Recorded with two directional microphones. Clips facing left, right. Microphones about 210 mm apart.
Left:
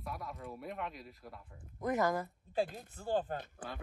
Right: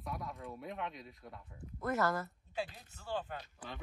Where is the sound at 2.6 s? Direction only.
50° left (ahead or behind).